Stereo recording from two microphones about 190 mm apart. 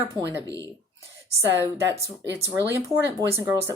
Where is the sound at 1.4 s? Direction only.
15° right (ahead or behind).